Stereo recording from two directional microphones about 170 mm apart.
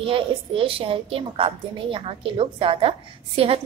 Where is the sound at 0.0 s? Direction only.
30° right (ahead or behind).